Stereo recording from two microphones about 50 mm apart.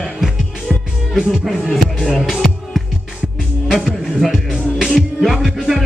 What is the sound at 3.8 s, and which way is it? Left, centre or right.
Speech, centre.